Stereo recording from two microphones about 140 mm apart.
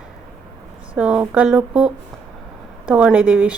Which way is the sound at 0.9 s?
10° right (ahead or behind).